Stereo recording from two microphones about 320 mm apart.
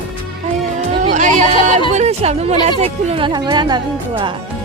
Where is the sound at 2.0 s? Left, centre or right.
Centre.